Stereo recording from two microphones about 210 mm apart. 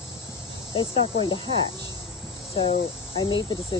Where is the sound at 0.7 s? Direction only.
25° left (ahead or behind).